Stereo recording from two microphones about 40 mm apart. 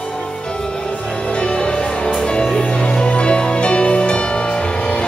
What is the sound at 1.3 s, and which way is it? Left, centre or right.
Music, left.